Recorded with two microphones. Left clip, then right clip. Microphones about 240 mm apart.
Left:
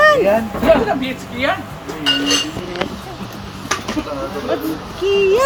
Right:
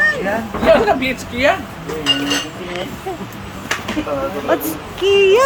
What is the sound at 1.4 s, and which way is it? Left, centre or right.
Speech, right.